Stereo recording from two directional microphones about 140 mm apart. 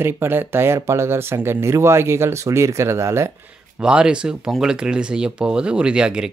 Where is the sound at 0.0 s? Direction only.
15° right (ahead or behind).